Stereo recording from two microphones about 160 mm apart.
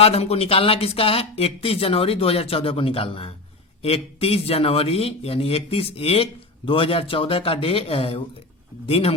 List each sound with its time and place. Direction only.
0.0 s speech: 40° left (ahead or behind)